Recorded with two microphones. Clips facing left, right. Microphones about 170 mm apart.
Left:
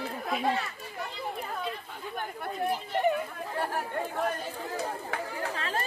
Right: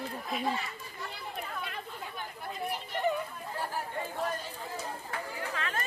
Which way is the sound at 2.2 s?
60° left (ahead or behind).